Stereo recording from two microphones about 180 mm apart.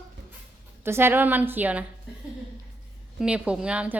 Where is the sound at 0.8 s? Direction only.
15° right (ahead or behind).